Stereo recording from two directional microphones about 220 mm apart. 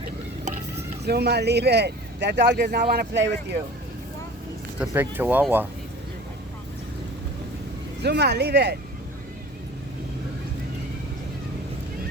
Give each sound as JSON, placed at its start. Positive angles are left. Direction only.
{"t": 1.0, "sound": "speech", "side_deg": -50}
{"t": 4.8, "sound": "speech", "side_deg": -10}
{"t": 8.0, "sound": "speech", "side_deg": -50}